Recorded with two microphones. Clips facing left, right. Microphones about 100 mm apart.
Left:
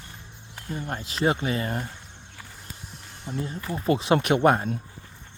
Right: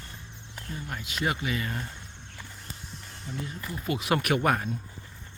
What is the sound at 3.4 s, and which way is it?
Speech, 35° left (ahead or behind).